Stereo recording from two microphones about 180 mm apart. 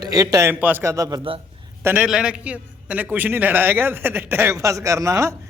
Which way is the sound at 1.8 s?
5° right (ahead or behind).